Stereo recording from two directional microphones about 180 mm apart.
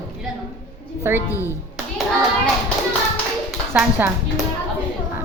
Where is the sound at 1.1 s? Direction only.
15° right (ahead or behind).